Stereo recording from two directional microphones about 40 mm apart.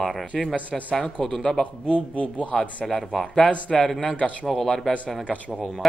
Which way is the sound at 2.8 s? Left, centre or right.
Centre.